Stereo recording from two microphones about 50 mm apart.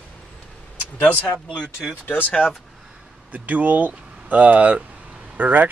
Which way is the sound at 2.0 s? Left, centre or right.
Left.